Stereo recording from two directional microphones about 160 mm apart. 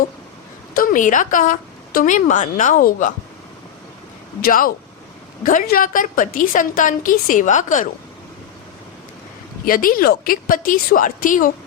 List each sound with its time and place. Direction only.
0.7 s a woman's voice: 60° left (ahead or behind)
4.4 s a woman's voice: 65° left (ahead or behind)
9.6 s a woman's voice: 60° left (ahead or behind)